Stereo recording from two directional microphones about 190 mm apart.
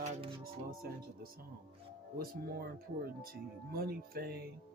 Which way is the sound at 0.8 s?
55° right (ahead or behind).